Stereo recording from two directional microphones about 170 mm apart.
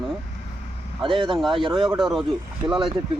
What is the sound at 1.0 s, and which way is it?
Speech, 30° right (ahead or behind).